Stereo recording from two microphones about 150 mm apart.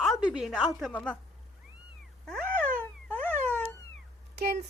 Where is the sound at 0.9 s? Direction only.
10° left (ahead or behind).